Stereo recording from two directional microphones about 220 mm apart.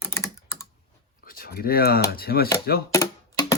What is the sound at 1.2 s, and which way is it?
Speech, 40° left (ahead or behind).